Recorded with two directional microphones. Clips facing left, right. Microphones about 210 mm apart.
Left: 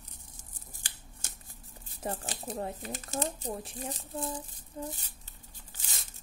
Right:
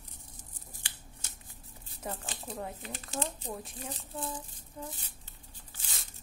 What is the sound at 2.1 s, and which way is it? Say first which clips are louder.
Speech: left 3 dB; 40° left (ahead or behind).